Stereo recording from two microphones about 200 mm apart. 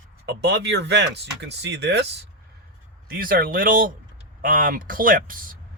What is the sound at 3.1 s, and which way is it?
Speech, 45° right (ahead or behind).